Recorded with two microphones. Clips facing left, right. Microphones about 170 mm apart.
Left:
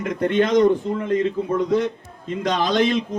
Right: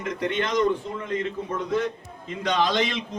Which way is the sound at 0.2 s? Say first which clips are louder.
Left 8 dB; 50° left (ahead or behind).